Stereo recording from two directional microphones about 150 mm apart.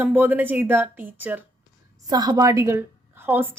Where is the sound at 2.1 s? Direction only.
25° right (ahead or behind).